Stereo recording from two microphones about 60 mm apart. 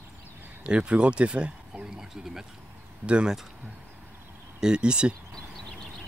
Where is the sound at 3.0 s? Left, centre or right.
Centre.